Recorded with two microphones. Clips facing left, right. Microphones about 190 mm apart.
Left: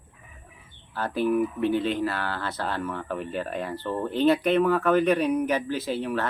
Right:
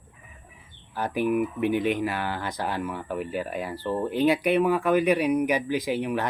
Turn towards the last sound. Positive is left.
turn(degrees=-15)  # may be behind; listen again after turning